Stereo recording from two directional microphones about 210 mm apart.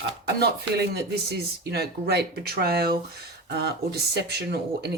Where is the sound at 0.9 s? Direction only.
50° right (ahead or behind).